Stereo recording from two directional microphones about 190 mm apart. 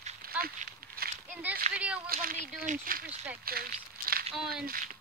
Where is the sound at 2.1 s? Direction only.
50° right (ahead or behind).